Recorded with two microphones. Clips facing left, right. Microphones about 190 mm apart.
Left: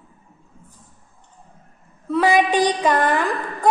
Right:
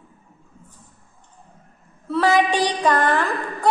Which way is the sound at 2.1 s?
15° left (ahead or behind).